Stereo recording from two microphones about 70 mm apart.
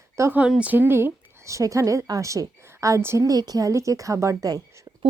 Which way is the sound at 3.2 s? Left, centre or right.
Right.